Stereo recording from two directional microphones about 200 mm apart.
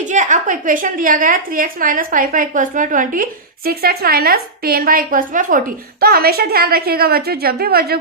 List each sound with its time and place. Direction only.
0.1 s a woman's voice: 40° right (ahead or behind)